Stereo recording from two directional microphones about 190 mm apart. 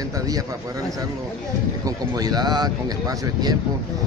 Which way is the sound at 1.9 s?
20° right (ahead or behind).